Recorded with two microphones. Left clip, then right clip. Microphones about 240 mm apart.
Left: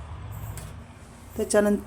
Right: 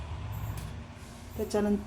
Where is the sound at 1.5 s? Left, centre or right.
Left.